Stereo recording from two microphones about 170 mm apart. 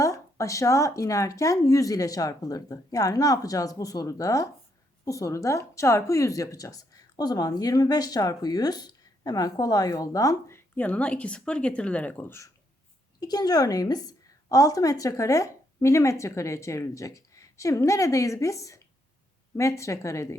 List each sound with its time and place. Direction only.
0.0 s speech: 20° left (ahead or behind)
13.1 s speech: 25° left (ahead or behind)